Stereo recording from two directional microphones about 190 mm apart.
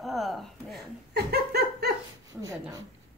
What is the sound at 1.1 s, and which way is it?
Laughter, 55° right (ahead or behind).